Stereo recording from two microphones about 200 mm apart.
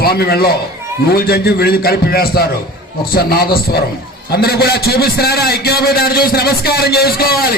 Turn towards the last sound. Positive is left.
turn(degrees=50)  # may be behind; listen again after turning